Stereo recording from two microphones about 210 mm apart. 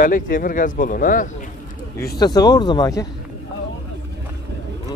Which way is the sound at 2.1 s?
20° left (ahead or behind).